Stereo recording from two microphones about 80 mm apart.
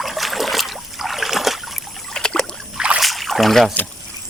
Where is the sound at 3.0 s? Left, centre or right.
Centre.